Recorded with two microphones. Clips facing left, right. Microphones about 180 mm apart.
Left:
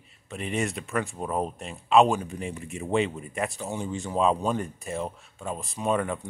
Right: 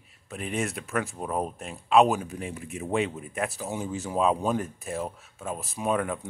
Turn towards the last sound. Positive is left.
turn(degrees=-5)  # may be behind; listen again after turning